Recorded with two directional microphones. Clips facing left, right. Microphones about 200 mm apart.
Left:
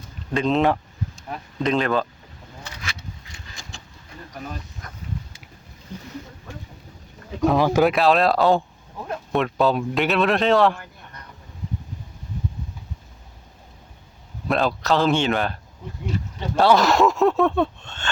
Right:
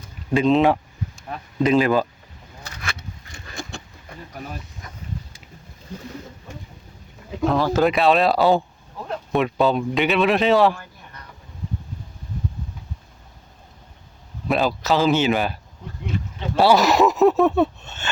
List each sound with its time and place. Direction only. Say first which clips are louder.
0.3 s speech: right 3 dB; centre (ahead or behind)
2.6 s vehicle: right 3 dB; 50° right (ahead or behind)
7.4 s speech: left 1 dB; 15° left (ahead or behind)
7.9 s speech: right 1 dB; centre (ahead or behind)
14.4 s speech: right 1 dB; centre (ahead or behind)